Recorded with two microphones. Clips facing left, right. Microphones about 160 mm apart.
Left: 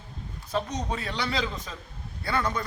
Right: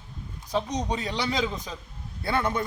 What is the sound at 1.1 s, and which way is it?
A man's voice, 15° right (ahead or behind).